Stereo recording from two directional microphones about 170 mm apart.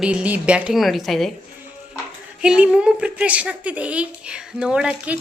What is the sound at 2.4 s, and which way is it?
A woman's voice, 5° right (ahead or behind).